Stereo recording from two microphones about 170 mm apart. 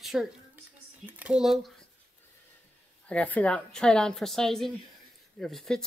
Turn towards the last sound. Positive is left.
turn(degrees=5)  # may be behind; listen again after turning